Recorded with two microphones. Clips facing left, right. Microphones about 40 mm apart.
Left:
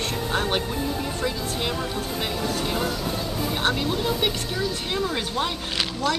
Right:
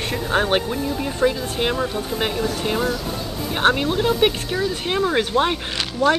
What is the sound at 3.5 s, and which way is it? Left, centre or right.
Speech, right.